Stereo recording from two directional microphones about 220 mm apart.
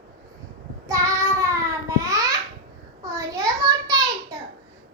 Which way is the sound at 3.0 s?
15° right (ahead or behind).